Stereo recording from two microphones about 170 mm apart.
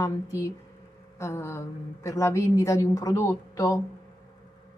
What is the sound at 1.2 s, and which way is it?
Speech, 15° left (ahead or behind).